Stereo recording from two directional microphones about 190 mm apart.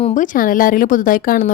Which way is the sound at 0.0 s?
40° left (ahead or behind).